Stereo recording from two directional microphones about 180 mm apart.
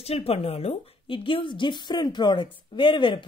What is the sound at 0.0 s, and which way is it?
A woman's voice, 35° left (ahead or behind).